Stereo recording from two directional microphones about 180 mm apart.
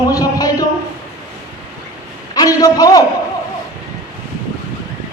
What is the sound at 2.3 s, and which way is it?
Speech, 20° left (ahead or behind).